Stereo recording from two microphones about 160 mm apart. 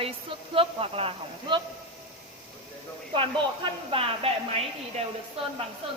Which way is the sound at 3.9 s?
35° right (ahead or behind).